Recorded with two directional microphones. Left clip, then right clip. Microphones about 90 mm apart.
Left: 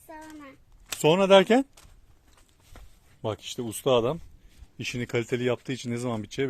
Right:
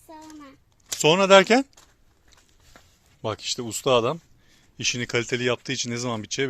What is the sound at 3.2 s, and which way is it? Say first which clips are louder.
Speech: right 4 dB; 5° left (ahead or behind).